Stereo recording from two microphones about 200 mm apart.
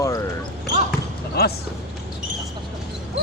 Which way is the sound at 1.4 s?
50° left (ahead or behind).